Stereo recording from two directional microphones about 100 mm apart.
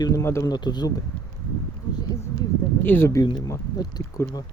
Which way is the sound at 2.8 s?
20° left (ahead or behind).